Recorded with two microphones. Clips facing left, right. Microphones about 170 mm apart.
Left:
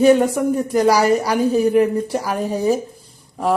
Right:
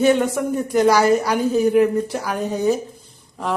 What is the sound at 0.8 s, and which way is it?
Speech, 35° left (ahead or behind).